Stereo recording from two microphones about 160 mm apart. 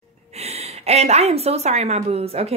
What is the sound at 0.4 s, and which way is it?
A woman's voice, 40° right (ahead or behind).